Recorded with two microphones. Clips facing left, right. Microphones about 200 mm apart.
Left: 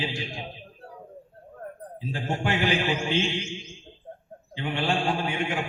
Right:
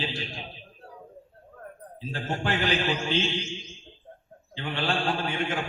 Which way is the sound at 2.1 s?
15° left (ahead or behind).